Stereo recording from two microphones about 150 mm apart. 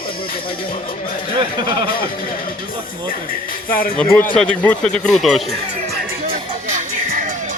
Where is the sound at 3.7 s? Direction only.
75° left (ahead or behind).